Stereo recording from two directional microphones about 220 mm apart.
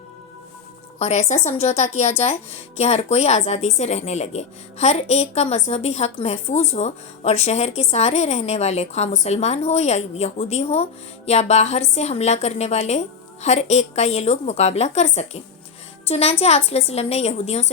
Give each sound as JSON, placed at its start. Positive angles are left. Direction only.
{"t": 0.9, "sound": "a woman's voice", "side_deg": 30}